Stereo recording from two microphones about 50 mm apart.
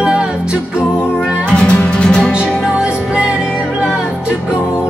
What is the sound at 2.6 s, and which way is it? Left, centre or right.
Music, centre.